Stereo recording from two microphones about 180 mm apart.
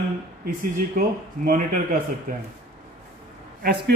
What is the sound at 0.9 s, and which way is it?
Speech, 50° right (ahead or behind).